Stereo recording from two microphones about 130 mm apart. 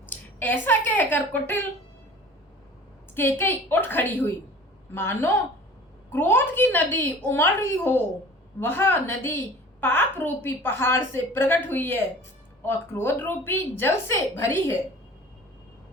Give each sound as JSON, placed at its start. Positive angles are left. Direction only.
{"t": 0.0, "sound": "speech", "side_deg": 15}
{"t": 3.2, "sound": "a woman's voice", "side_deg": 15}